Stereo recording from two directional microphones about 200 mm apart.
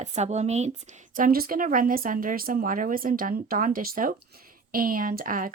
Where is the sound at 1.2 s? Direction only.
45° right (ahead or behind).